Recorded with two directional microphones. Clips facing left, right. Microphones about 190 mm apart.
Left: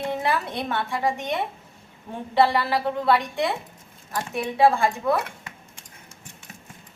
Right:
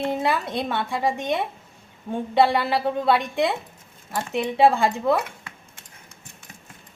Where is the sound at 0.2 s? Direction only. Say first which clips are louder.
Right 2 dB; 20° right (ahead or behind).